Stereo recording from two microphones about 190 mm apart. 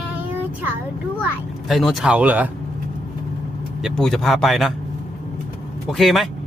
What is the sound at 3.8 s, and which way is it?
Speech, centre (ahead or behind).